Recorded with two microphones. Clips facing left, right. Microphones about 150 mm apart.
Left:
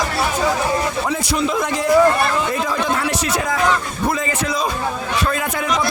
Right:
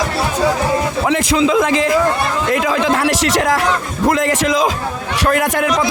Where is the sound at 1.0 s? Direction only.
90° right.